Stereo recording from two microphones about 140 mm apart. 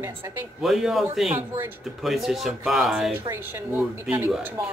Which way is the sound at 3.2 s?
15° right (ahead or behind).